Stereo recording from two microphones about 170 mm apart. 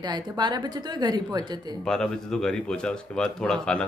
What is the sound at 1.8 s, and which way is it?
Speech, 5° left (ahead or behind).